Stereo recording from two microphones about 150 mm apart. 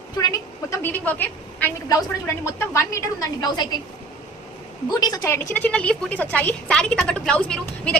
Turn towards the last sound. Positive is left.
turn(degrees=5)  # may be behind; listen again after turning